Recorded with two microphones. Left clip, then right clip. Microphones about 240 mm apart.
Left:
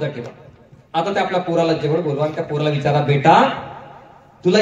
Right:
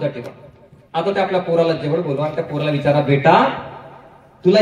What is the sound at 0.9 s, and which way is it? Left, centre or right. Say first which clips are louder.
A man's voice: right 1 dB; left.